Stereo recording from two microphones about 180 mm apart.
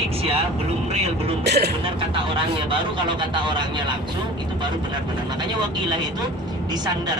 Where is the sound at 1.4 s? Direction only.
65° right (ahead or behind).